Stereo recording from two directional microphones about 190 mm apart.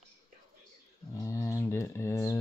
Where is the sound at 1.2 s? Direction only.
15° left (ahead or behind).